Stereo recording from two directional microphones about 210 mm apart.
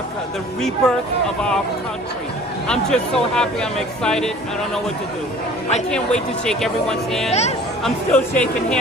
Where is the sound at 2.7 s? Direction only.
5° left (ahead or behind).